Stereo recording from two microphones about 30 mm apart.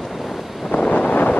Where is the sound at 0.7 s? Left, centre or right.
Left.